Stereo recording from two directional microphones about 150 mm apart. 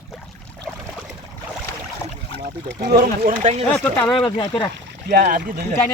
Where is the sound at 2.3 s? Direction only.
80° right.